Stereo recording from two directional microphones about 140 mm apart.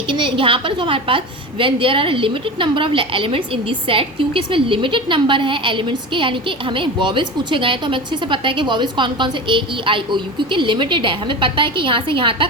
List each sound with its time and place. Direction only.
0.1 s a woman's voice: 35° right (ahead or behind)